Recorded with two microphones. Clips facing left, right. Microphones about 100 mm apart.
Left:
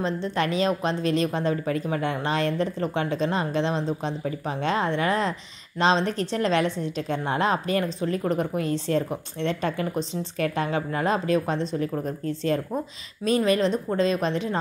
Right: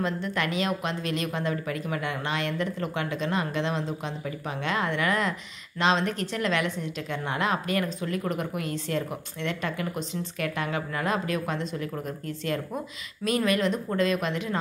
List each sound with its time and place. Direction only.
0.0 s a woman's voice: 30° left (ahead or behind)